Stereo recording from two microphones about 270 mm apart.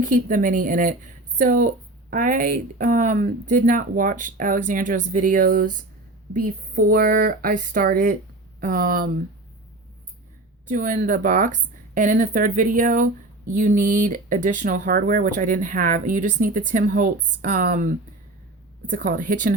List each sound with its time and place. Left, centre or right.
0.0 s speech: right
10.7 s speech: right